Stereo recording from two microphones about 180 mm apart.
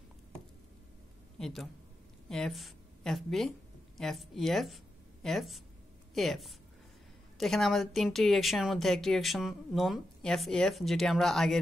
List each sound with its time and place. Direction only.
1.4 s a man's voice: centre (ahead or behind)